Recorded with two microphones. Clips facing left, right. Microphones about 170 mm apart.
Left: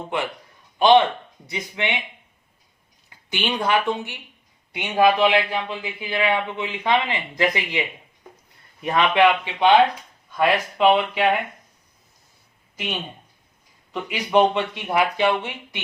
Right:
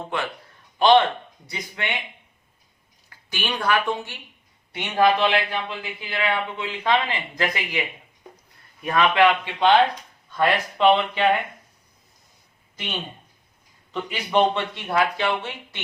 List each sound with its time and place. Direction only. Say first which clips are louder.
0.8 s a man's voice: left 1 dB; 15° left (ahead or behind)
3.1 s a man's voice: left 3 dB; 20° left (ahead or behind)
8.8 s a man's voice: left 1 dB; 20° left (ahead or behind)
13.9 s a man's voice: left 3 dB; 10° left (ahead or behind)